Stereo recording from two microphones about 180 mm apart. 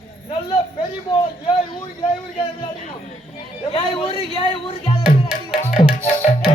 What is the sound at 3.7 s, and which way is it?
Speech, 30° left (ahead or behind).